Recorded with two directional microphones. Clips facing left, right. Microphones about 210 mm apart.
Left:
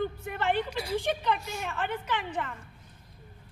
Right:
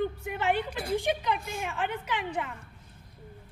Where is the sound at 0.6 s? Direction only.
55° right (ahead or behind).